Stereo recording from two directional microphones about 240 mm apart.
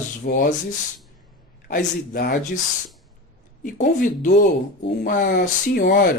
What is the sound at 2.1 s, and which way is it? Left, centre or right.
Speech, left.